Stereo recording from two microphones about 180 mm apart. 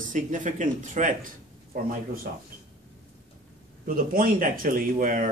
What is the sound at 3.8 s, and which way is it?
Speech, 50° right (ahead or behind).